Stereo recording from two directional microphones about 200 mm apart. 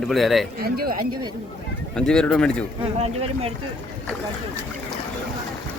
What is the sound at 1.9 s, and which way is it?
Speech, 5° left (ahead or behind).